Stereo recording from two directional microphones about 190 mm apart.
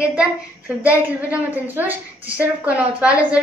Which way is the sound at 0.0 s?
5° right (ahead or behind).